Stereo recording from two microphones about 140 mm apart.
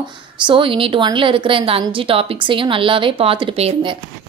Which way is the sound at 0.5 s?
40° right (ahead or behind).